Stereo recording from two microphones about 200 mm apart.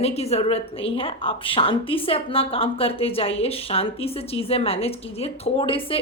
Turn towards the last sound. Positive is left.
turn(degrees=25)  # may be behind; listen again after turning